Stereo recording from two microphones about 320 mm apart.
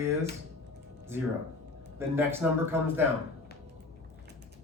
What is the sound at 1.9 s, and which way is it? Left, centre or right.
Speech, centre.